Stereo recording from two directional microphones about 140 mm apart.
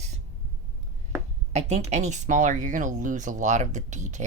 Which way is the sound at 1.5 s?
50° right (ahead or behind).